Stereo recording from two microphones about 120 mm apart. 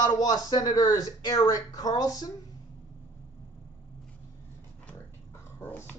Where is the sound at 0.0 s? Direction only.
35° left (ahead or behind).